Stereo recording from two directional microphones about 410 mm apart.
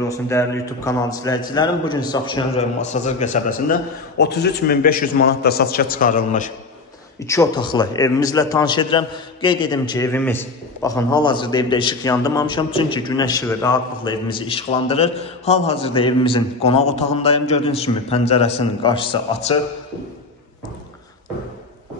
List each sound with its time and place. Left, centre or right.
0.1 s a man's voice: centre